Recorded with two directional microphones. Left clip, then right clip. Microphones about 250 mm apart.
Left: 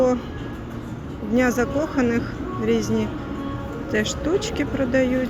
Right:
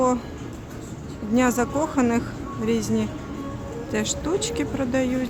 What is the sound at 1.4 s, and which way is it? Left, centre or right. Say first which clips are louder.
A woman's voice: left 1 dB; centre.